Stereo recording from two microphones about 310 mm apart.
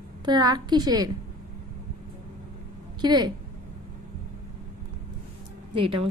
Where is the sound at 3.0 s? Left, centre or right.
Centre.